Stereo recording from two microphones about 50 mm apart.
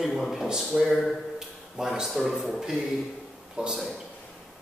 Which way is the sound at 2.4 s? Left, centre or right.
Centre.